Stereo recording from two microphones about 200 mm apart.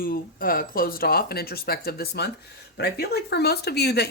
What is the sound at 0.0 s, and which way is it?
Speech, 45° left (ahead or behind).